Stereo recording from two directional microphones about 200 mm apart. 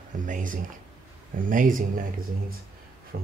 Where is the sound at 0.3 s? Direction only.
40° right (ahead or behind).